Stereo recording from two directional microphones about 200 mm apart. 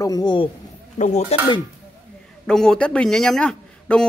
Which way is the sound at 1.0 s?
35° left (ahead or behind).